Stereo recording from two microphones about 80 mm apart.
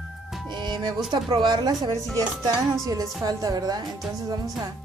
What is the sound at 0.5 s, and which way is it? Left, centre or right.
Music, right.